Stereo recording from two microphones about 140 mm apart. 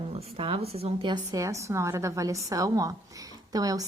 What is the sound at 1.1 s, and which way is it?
A woman's voice, 25° right (ahead or behind).